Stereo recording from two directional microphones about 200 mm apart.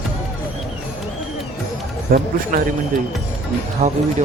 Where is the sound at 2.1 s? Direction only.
45° right (ahead or behind).